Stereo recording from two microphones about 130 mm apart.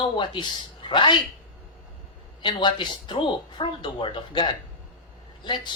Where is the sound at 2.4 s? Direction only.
35° left (ahead or behind).